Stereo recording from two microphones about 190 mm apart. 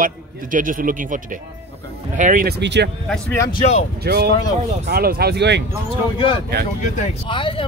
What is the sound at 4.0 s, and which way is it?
Speech, 55° right (ahead or behind).